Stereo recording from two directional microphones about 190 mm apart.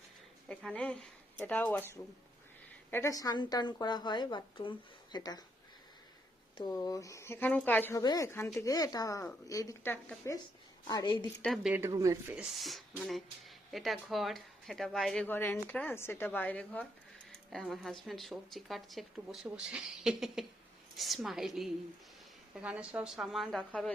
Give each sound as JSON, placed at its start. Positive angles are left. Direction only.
{"t": 0.4, "sound": "speech", "side_deg": 5}
{"t": 2.9, "sound": "a woman's voice", "side_deg": 15}
{"t": 6.6, "sound": "speech", "side_deg": 20}
{"t": 10.8, "sound": "a woman's voice", "side_deg": 20}
{"t": 11.4, "sound": "speech", "side_deg": 0}
{"t": 11.7, "sound": "speech", "side_deg": -15}
{"t": 12.4, "sound": "speech", "side_deg": 0}